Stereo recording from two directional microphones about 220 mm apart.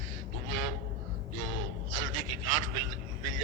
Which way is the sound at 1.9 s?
65° right (ahead or behind).